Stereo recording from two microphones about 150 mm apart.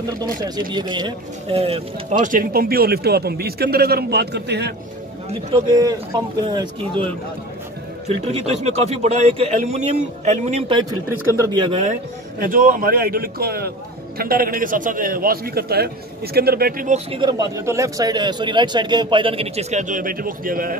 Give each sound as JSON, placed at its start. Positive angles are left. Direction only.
{"t": 0.2, "sound": "a man's voice", "side_deg": -30}
{"t": 2.1, "sound": "a man's voice", "side_deg": -65}
{"t": 5.7, "sound": "speech", "side_deg": -25}
{"t": 8.1, "sound": "a man's voice", "side_deg": -45}
{"t": 11.1, "sound": "speech", "side_deg": -25}
{"t": 11.8, "sound": "a man's voice", "side_deg": -60}
{"t": 16.9, "sound": "a man's voice", "side_deg": -40}
{"t": 17.3, "sound": "a man's voice", "side_deg": -25}